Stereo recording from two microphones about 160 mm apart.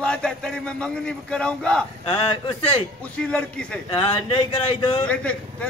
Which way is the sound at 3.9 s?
30° left (ahead or behind).